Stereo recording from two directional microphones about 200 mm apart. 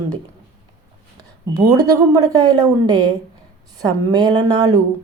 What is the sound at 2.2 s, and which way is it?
A woman's voice, 20° right (ahead or behind).